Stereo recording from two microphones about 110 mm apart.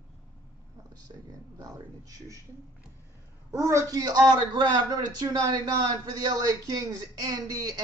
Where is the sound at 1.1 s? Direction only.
45° right (ahead or behind).